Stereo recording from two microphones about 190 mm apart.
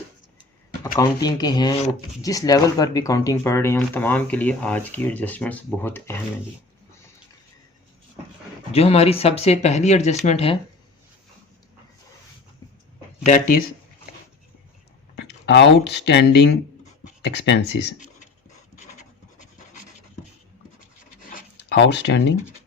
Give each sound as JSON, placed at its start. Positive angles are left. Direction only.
{"t": 0.9, "sound": "speech", "side_deg": 20}
{"t": 8.7, "sound": "speech", "side_deg": 30}
{"t": 13.2, "sound": "speech", "side_deg": 40}
{"t": 15.1, "sound": "speech", "side_deg": 65}
{"t": 18.8, "sound": "filing", "side_deg": 40}
{"t": 21.3, "sound": "a sound", "side_deg": 65}